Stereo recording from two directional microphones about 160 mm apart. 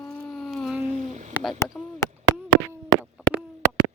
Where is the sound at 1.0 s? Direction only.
45° right (ahead or behind).